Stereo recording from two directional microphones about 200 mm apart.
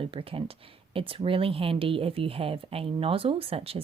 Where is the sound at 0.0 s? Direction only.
25° right (ahead or behind).